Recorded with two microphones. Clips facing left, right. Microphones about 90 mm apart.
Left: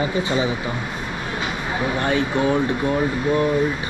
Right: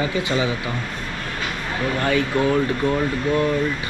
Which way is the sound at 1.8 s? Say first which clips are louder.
Right 1 dB; 15° left (ahead or behind).